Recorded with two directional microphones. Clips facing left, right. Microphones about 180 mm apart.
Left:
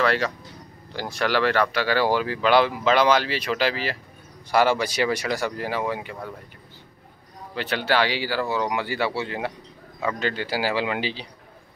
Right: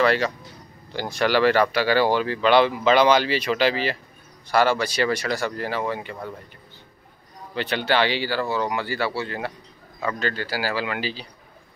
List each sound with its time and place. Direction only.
0.0 s speech: centre (ahead or behind)
4.5 s speech: 15° left (ahead or behind)
7.5 s speech: 5° left (ahead or behind)